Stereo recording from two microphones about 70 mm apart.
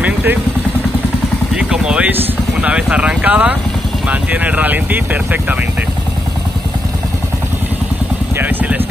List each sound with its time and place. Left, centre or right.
0.0 s vehicle: right
1.5 s vehicle: centre
2.6 s speech: centre
8.4 s speech: right